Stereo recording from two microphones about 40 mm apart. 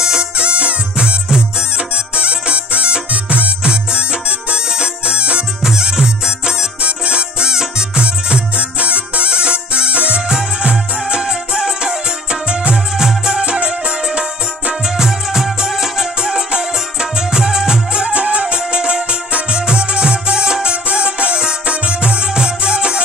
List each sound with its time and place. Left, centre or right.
0.0 s music: centre
0.4 s music: right
5.6 s music: centre
6.8 s music: right
8.0 s music: right
15.0 s music: centre